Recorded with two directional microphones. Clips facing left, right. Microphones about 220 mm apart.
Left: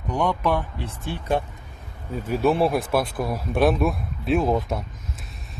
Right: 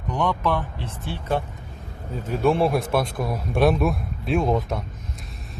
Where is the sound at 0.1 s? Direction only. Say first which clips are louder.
Left 1 dB; 10° left (ahead or behind).